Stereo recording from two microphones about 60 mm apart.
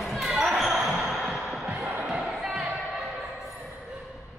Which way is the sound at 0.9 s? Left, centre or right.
Centre.